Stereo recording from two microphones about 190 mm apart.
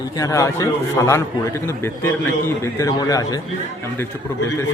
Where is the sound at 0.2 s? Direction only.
15° left (ahead or behind).